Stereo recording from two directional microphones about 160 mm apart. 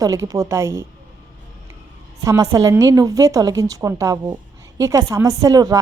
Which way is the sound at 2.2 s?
20° right (ahead or behind).